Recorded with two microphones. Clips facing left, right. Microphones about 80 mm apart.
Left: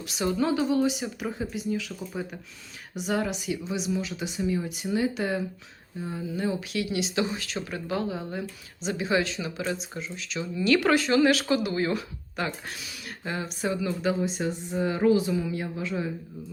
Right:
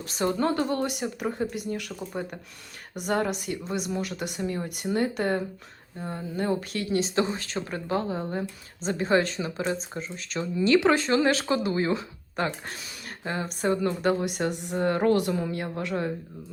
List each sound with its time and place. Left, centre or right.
0.0 s speech: right
2.0 s speech: right
2.9 s speech: right
10.7 s speech: right
12.6 s speech: right
15.4 s speech: right